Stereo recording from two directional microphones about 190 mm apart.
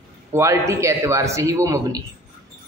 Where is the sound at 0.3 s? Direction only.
15° right (ahead or behind).